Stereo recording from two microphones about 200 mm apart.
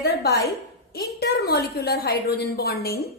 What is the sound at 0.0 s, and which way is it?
A woman's voice, 50° left (ahead or behind).